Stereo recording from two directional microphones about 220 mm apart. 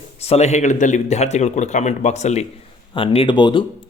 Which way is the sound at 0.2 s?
30° left (ahead or behind).